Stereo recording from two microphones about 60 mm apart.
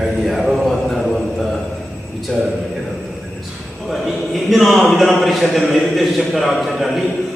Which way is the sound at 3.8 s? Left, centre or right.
Centre.